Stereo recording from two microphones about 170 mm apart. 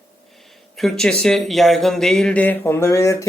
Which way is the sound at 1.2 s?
Centre (ahead or behind).